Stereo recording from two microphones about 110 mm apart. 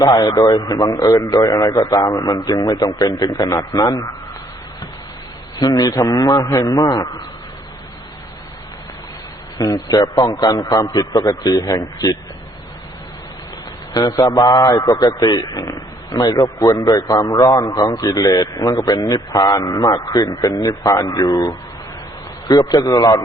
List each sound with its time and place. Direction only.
0.0 s a man's voice: 35° left (ahead or behind)
5.5 s a man's voice: 35° left (ahead or behind)
9.6 s a man's voice: 35° left (ahead or behind)
13.9 s a man's voice: 35° left (ahead or behind)